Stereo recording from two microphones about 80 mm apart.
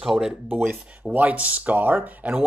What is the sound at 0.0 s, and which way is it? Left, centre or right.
Speech, centre.